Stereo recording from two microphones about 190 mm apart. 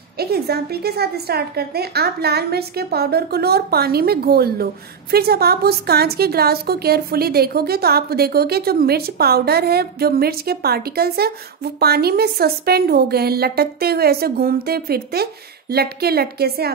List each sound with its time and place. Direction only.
0.2 s a woman's voice: 55° right (ahead or behind)